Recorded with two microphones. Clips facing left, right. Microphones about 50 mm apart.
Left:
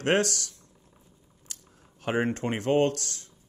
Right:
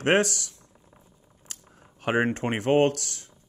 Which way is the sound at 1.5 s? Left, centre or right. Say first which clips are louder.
Right 2 dB; right.